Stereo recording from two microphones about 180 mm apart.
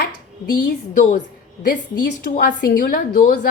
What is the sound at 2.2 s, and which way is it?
A woman's voice, 50° left (ahead or behind).